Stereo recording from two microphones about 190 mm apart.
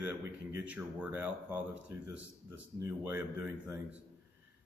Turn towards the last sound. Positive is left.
turn(degrees=-10)  # may be behind; listen again after turning